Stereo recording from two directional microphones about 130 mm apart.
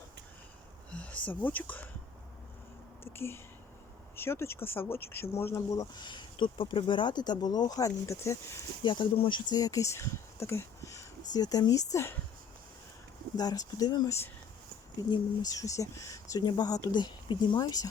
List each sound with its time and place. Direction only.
0.9 s speech: 10° left (ahead or behind)
3.0 s speech: 20° left (ahead or behind)
8.8 s speech: 40° left (ahead or behind)
9.5 s speech: 30° left (ahead or behind)
13.3 s speech: 30° left (ahead or behind)